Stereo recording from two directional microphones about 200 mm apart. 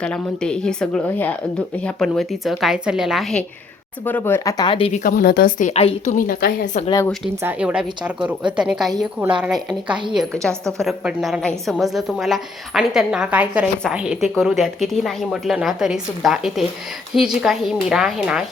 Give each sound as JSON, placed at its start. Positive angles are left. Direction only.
{"t": 0.0, "sound": "a woman's voice", "side_deg": 5}
{"t": 4.0, "sound": "speech", "side_deg": 10}
{"t": 5.0, "sound": "a woman's voice", "side_deg": 45}
{"t": 7.4, "sound": "a woman's voice", "side_deg": -5}